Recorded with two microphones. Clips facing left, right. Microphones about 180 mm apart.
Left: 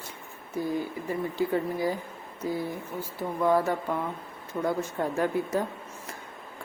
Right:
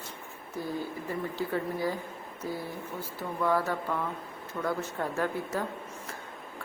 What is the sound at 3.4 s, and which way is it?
Speech, 20° left (ahead or behind).